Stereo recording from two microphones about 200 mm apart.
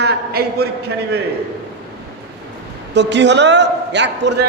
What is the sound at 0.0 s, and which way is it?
A man's voice, 55° right (ahead or behind).